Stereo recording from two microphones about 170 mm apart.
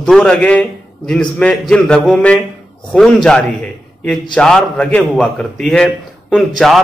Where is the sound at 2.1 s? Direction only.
5° left (ahead or behind).